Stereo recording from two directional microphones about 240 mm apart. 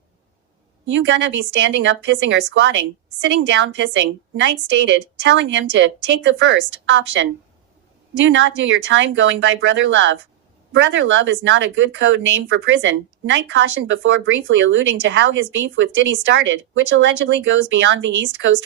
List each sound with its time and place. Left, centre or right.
0.9 s speech: right